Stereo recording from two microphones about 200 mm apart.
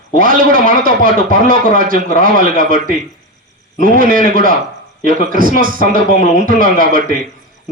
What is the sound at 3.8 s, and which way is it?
A man's voice, 45° right (ahead or behind).